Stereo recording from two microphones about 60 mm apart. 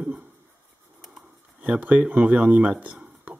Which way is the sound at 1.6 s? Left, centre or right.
Right.